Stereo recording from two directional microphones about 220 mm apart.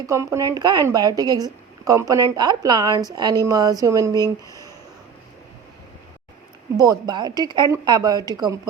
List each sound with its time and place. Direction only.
0.0 s speech: 15° right (ahead or behind)
6.7 s speech: 15° right (ahead or behind)